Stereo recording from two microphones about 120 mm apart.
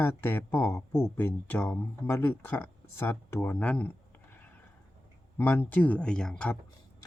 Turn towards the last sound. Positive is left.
turn(degrees=5)  # may be behind; listen again after turning